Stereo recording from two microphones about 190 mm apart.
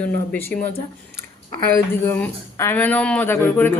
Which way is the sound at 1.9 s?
10° left (ahead or behind).